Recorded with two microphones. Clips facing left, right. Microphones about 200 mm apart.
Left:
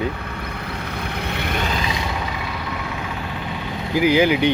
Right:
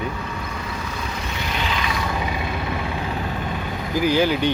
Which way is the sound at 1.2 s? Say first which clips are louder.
Left 5 dB; 60° left (ahead or behind).